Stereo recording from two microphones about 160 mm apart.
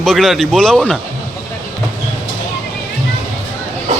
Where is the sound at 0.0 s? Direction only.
Centre (ahead or behind).